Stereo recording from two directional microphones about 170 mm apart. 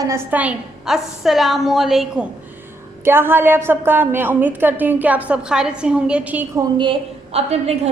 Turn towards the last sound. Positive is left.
turn(degrees=-35)  # may be behind; listen again after turning